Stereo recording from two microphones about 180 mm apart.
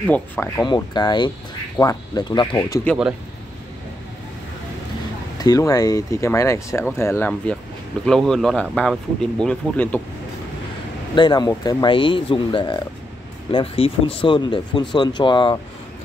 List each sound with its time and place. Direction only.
0.0 s speech: 10° left (ahead or behind)
0.6 s speech: 25° left (ahead or behind)
5.4 s speech: 20° left (ahead or behind)
11.1 s speech: 25° left (ahead or behind)